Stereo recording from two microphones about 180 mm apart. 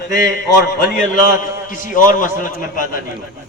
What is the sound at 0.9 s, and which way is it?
A man's voice, 45° left (ahead or behind).